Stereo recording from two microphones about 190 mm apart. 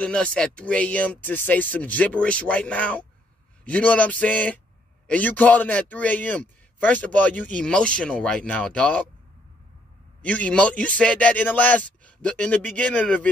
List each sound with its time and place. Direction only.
0.0 s a man's voice: 5° left (ahead or behind)
10.2 s a man's voice: 5° left (ahead or behind)